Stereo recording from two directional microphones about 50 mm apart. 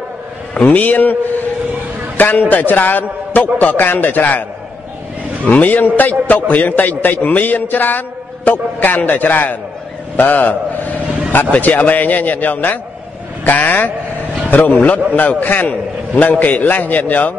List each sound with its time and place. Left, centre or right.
0.7 s a man's voice: left
5.5 s a man's voice: left